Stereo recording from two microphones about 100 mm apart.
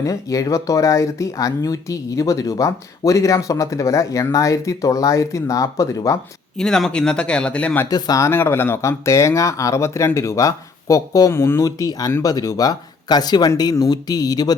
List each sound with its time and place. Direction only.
0.0 s speech: 35° left (ahead or behind)
6.6 s speech: 5° left (ahead or behind)
7.9 s speech: 40° left (ahead or behind)
8.2 s speech: 20° left (ahead or behind)
11.6 s speech: 40° left (ahead or behind)